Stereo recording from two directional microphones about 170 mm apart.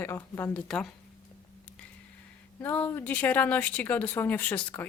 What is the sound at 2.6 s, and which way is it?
Speech, 10° left (ahead or behind).